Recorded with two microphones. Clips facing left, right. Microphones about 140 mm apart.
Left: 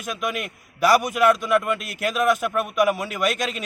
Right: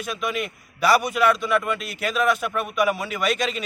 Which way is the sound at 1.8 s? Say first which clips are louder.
Left 1 dB; 50° left (ahead or behind).